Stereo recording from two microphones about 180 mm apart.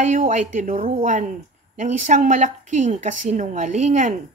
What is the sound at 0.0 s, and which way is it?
Speech, 45° right (ahead or behind).